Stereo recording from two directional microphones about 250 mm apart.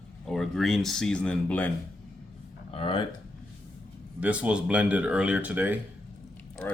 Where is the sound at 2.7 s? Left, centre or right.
Left.